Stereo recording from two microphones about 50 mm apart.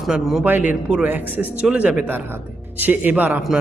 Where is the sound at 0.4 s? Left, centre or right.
Right.